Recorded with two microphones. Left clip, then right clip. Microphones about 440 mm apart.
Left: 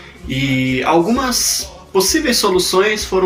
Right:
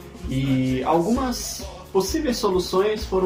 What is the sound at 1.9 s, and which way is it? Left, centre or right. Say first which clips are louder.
Speech: left 8 dB; right.